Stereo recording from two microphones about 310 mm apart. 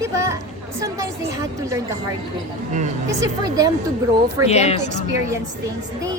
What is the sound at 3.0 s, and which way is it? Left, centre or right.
Speech, centre.